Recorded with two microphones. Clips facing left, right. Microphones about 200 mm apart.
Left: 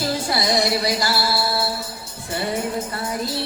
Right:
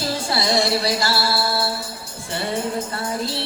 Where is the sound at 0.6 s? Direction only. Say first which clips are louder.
Even; 20° left (ahead or behind).